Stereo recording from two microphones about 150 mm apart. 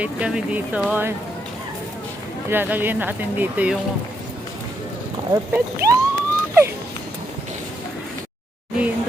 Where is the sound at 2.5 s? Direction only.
15° right (ahead or behind).